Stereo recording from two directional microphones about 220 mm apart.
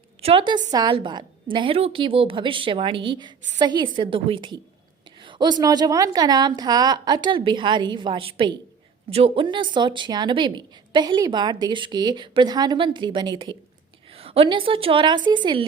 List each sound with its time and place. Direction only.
0.2 s a woman's voice: 25° right (ahead or behind)